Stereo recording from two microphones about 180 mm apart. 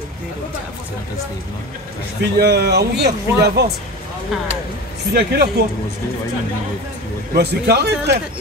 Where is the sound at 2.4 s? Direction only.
65° right (ahead or behind).